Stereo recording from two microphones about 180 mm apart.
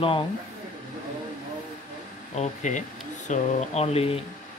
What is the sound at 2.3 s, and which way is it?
Speech, 40° left (ahead or behind).